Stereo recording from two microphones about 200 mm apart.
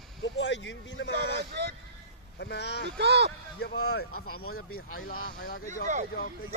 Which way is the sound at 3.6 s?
55° left (ahead or behind).